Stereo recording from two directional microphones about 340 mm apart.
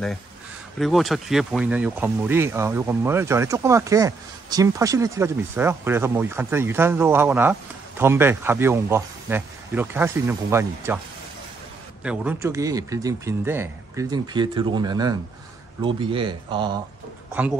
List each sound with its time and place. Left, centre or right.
0.7 s speech: centre
12.0 s speech: centre